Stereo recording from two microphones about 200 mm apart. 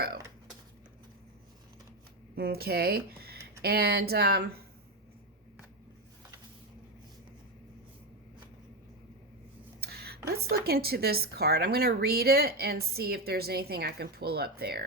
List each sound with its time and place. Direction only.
2.3 s a woman's voice: 50° right (ahead or behind)
9.8 s a sound: 50° right (ahead or behind)
10.5 s a woman's voice: 50° right (ahead or behind)